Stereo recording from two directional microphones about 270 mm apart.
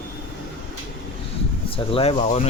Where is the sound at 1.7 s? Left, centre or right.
Left.